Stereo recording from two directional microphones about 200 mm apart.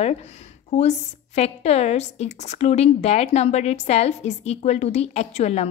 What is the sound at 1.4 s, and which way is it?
Speech, 35° left (ahead or behind).